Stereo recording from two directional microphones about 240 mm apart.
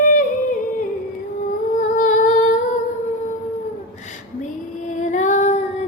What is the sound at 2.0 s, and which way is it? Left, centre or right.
Humming, left.